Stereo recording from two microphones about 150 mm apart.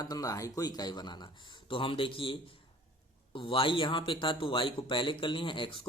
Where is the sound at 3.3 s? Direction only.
35° left (ahead or behind).